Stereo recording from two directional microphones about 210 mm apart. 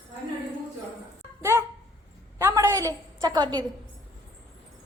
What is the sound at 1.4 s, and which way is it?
Dog, 10° right (ahead or behind).